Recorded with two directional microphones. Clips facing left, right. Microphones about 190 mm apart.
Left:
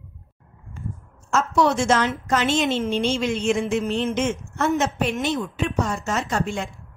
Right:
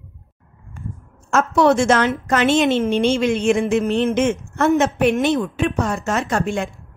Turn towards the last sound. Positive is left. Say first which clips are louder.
# right 4 dB
turn(degrees=-60)  # may be behind; listen again after turning